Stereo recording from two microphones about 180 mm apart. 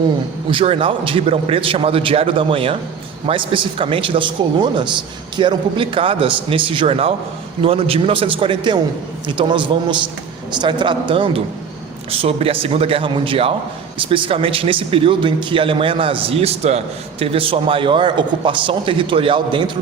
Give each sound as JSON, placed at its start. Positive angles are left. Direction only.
{"t": 0.5, "sound": "a man's voice", "side_deg": -30}